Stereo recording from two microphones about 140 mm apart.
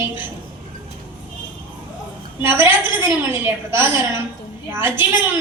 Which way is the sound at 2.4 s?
15° right (ahead or behind).